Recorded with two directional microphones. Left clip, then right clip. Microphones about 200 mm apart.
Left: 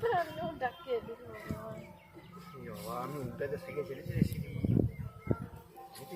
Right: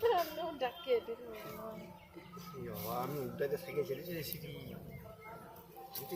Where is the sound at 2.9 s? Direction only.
45° right (ahead or behind).